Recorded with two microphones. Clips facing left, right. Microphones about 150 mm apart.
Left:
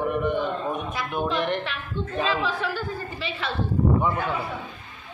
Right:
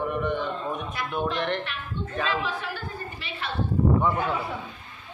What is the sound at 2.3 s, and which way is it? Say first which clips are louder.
Speech: left 3 dB; 90° left.